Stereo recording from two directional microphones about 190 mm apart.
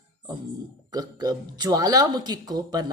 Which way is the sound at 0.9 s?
20° right (ahead or behind).